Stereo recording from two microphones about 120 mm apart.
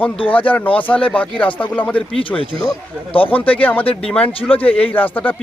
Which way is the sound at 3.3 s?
15° left (ahead or behind).